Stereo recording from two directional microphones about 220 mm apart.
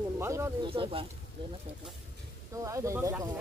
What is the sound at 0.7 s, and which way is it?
Speech, 25° right (ahead or behind).